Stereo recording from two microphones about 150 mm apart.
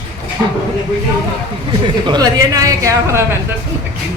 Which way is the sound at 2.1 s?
25° right (ahead or behind).